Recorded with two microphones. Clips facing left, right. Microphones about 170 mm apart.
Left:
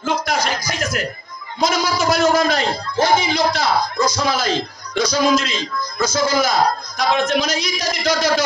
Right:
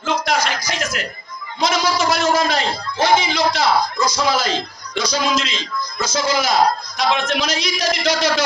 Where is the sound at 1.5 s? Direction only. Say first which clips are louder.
Even; 50° left (ahead or behind).